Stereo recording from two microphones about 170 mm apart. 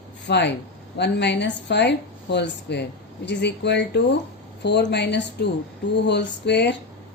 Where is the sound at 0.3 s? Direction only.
90° left.